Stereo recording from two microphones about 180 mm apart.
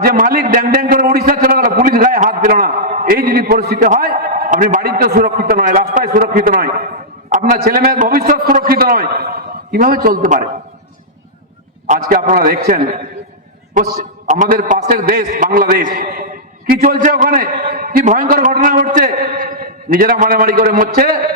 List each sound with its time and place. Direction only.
0.0 s a sound: 50° right (ahead or behind)
3.8 s a man's voice: 50° right (ahead or behind)
11.9 s a man's voice: 50° right (ahead or behind)
14.3 s a man's voice: 45° right (ahead or behind)